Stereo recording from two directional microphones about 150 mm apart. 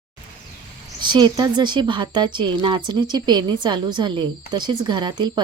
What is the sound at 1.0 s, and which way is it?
A woman's voice, 30° right (ahead or behind).